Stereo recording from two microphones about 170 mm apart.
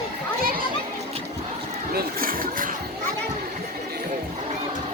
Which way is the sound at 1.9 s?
55° right (ahead or behind).